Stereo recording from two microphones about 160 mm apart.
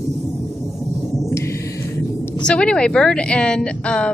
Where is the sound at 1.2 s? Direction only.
15° left (ahead or behind).